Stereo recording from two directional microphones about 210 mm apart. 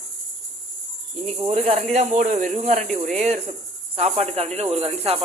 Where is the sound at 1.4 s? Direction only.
30° right (ahead or behind).